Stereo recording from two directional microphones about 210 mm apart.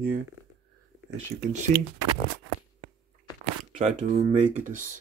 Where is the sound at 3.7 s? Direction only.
35° right (ahead or behind).